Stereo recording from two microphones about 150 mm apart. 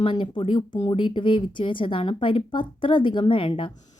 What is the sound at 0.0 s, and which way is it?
Speech, 35° left (ahead or behind).